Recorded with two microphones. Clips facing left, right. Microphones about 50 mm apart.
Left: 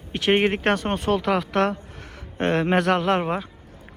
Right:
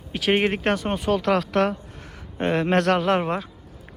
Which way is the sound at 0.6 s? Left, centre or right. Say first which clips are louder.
Left 1 dB; left.